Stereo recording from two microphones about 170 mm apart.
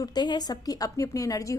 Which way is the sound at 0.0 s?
25° left (ahead or behind).